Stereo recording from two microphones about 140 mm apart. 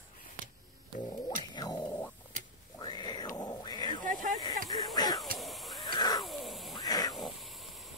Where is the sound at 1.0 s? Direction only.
30° left (ahead or behind).